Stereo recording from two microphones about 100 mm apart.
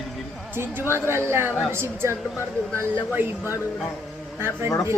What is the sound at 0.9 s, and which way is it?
A woman's voice, 25° right (ahead or behind).